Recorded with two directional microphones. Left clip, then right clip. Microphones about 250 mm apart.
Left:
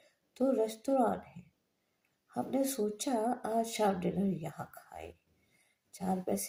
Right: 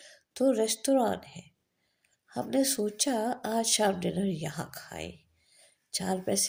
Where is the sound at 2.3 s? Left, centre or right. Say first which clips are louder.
Right 5 dB; right.